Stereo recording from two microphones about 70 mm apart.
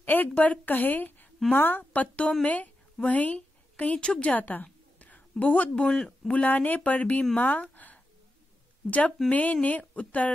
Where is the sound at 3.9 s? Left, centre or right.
Centre.